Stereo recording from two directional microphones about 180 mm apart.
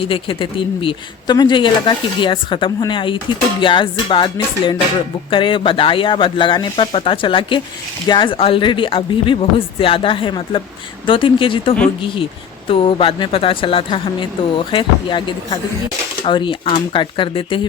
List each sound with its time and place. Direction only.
0.0 s a woman's voice: 30° left (ahead or behind)